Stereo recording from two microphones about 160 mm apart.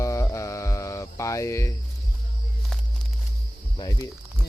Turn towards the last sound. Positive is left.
turn(degrees=25)  # may be behind; listen again after turning